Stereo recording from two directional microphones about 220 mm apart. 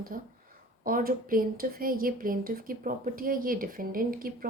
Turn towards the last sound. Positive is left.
turn(degrees=-40)  # may be behind; listen again after turning